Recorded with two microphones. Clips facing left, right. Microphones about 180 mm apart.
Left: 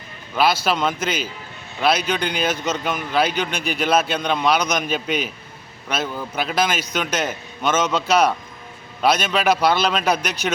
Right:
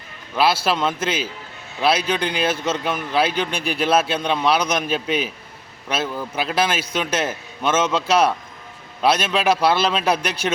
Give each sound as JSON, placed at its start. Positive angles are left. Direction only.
{"t": 0.6, "sound": "a man's voice", "side_deg": 0}